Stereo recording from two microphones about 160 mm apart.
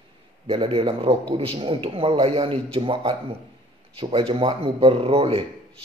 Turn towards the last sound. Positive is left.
turn(degrees=-35)  # may be behind; listen again after turning